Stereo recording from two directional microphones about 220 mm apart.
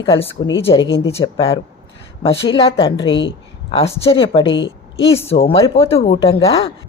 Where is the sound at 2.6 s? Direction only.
25° left (ahead or behind).